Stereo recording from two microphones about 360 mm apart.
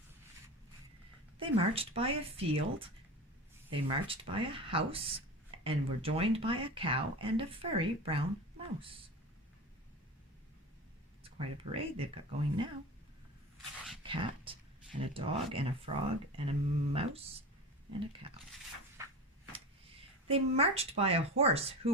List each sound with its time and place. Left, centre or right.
1.4 s speech: centre
11.2 s speech: centre
13.6 s a sound: centre
14.0 s speech: centre
19.0 s a sound: centre
20.2 s speech: centre